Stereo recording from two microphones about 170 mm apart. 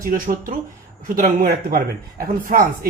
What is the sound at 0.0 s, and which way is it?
Speech, 55° right (ahead or behind).